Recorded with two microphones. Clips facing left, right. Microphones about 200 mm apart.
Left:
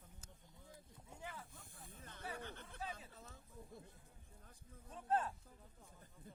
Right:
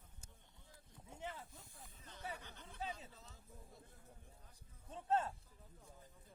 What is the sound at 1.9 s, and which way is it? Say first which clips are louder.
Music: left 2 dB; 55° left (ahead or behind).